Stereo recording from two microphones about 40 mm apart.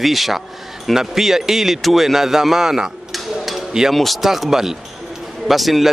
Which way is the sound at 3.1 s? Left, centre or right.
Centre.